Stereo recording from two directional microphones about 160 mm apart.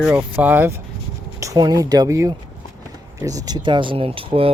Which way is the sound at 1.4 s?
20° right (ahead or behind).